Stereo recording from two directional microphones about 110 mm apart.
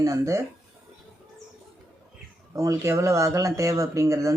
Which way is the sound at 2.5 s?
30° right (ahead or behind).